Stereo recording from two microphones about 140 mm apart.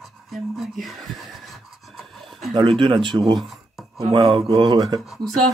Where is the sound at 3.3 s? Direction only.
Centre (ahead or behind).